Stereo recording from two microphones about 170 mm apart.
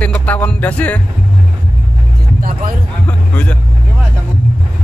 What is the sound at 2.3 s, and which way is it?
Speech, 55° right (ahead or behind).